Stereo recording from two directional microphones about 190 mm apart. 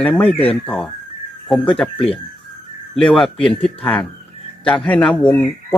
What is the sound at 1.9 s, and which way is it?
Speech, 30° left (ahead or behind).